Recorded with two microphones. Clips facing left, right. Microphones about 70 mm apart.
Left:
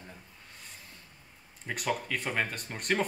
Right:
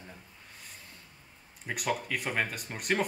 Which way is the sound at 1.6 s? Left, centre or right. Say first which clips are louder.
Even; centre.